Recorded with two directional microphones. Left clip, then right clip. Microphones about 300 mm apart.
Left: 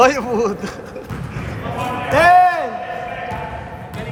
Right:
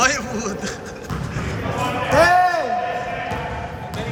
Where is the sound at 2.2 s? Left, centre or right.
Left.